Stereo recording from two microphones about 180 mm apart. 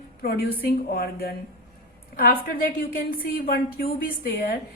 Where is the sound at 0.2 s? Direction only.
55° left (ahead or behind).